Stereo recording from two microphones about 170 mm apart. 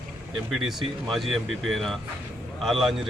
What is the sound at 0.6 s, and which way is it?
Speech, centre (ahead or behind).